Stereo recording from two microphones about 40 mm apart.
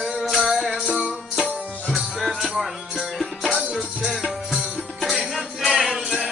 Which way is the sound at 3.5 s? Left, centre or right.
Centre.